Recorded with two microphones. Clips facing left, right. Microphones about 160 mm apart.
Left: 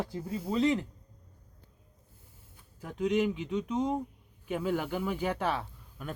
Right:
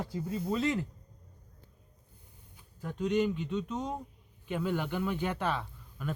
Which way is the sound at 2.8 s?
10° left (ahead or behind).